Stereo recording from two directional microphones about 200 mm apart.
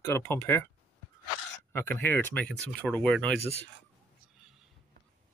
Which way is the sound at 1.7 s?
10° left (ahead or behind).